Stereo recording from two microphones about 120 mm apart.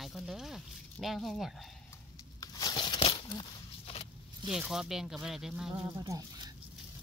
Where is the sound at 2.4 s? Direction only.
30° left (ahead or behind); by 4.0 s 50° left (ahead or behind).